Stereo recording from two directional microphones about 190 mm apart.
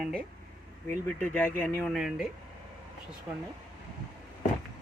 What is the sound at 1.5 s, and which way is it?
Speech, 10° left (ahead or behind).